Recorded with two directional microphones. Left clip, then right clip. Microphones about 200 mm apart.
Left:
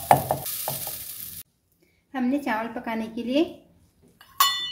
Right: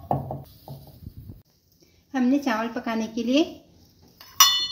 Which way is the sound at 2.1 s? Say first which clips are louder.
Right 2 dB; 30° right (ahead or behind).